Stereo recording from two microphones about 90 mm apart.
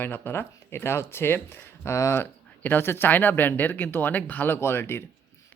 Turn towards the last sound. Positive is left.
turn(degrees=25)  # may be behind; listen again after turning